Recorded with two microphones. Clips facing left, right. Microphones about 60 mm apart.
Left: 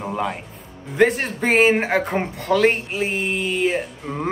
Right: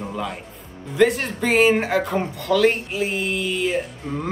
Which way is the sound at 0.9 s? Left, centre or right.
Left.